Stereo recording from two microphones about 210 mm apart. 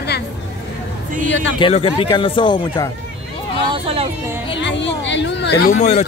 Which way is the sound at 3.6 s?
25° right (ahead or behind).